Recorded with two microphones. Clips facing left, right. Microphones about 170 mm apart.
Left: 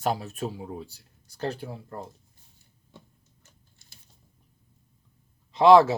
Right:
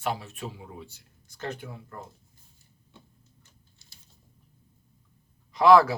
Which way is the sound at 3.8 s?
55° left (ahead or behind).